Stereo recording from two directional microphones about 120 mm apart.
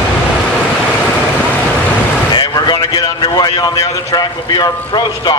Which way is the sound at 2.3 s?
35° left (ahead or behind).